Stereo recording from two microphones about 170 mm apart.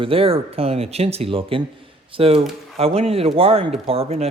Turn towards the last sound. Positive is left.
turn(degrees=-35)  # may be behind; listen again after turning